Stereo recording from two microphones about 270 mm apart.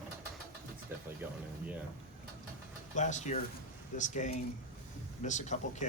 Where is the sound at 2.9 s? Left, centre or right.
Left.